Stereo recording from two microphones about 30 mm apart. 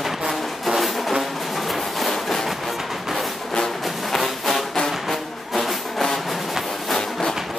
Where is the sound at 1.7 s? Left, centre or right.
Centre.